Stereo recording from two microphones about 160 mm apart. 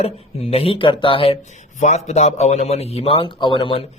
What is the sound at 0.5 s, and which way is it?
Speech, 35° left (ahead or behind).